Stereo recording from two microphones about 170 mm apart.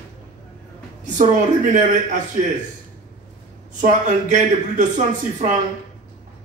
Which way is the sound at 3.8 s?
45° right (ahead or behind).